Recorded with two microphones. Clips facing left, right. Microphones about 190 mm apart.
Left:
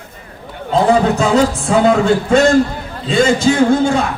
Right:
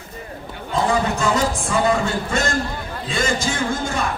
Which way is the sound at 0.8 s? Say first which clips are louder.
Left 7 dB; 65° left (ahead or behind).